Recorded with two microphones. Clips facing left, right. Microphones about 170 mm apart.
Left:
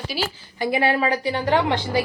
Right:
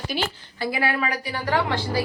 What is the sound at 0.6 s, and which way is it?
A woman's voice, 20° left (ahead or behind).